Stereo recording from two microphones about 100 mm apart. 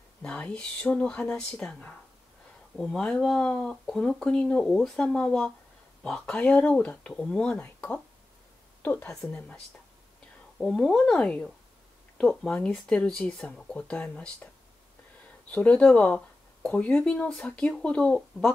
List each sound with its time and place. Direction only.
0.2 s a woman's voice: 10° left (ahead or behind)
10.6 s speech: 5° left (ahead or behind)
15.5 s speech: 15° left (ahead or behind)